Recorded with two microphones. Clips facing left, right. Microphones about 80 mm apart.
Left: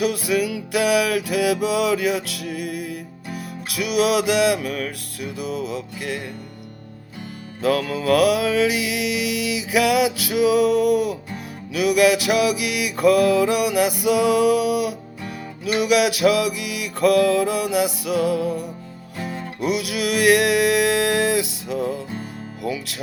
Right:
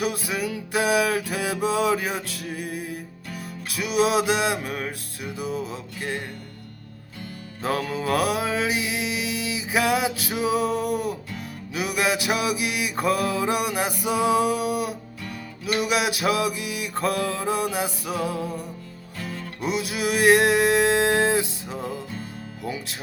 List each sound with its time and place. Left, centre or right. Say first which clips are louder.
0.0 s music: left 6 dB; right
7.6 s music: left 5 dB; right
19.2 s music: left 4 dB; left
19.6 s a sound: left 3 dB; right
22.6 s music: left 5 dB; right